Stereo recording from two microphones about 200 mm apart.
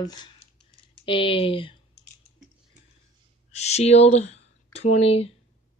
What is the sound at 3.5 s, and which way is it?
Speech, 35° left (ahead or behind).